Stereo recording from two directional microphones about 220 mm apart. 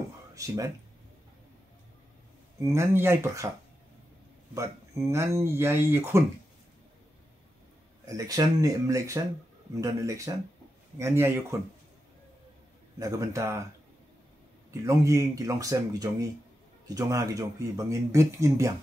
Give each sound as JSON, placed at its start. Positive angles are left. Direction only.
{"t": 0.3, "sound": "speech", "side_deg": -15}
{"t": 2.6, "sound": "speech", "side_deg": -10}
{"t": 4.6, "sound": "speech", "side_deg": -15}
{"t": 8.1, "sound": "speech", "side_deg": -15}
{"t": 13.0, "sound": "speech", "side_deg": -15}
{"t": 14.7, "sound": "speech", "side_deg": -15}